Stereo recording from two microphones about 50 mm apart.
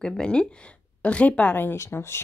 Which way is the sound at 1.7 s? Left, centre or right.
Left.